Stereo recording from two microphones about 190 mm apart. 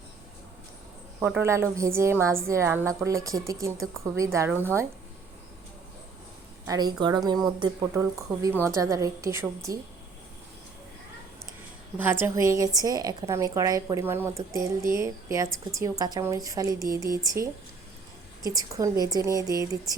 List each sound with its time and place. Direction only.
1.2 s a woman's voice: 10° right (ahead or behind)
6.7 s a woman's voice: 20° right (ahead or behind)
11.9 s a woman's voice: 10° right (ahead or behind)